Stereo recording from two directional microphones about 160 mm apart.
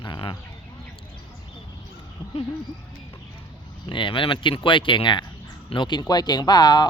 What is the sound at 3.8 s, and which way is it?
Speech, 30° left (ahead or behind).